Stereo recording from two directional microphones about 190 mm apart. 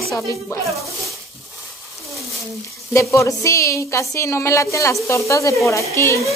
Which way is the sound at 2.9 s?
15° left (ahead or behind).